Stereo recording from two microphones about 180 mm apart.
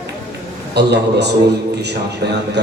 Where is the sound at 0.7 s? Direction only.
70° right (ahead or behind).